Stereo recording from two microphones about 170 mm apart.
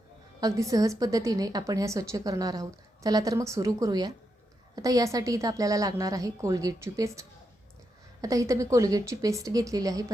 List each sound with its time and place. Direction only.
0.3 s a woman's voice: 20° right (ahead or behind)